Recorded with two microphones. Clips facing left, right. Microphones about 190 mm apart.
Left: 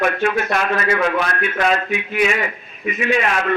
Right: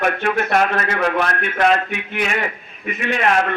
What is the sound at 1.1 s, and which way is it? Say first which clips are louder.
A man's voice: even; 55° right (ahead or behind).